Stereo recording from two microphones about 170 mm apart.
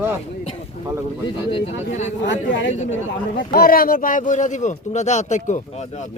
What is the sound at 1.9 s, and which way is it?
Speech, 45° left (ahead or behind).